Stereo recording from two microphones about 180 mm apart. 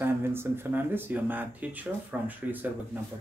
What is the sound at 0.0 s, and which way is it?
Speech, 15° right (ahead or behind).